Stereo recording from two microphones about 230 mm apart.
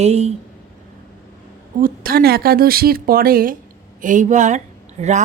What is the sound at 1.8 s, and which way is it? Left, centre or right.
Speech, right.